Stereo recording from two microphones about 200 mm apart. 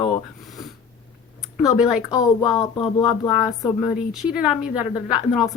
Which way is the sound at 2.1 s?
15° left (ahead or behind).